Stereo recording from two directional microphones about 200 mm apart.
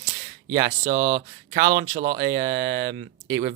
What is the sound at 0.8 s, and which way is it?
Speech, 40° right (ahead or behind).